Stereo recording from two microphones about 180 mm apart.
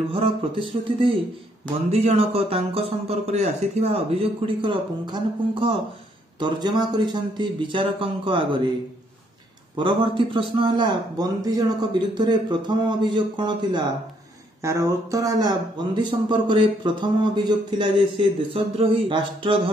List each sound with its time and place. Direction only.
0.1 s a man's voice: 30° right (ahead or behind)
9.8 s speech: 25° right (ahead or behind)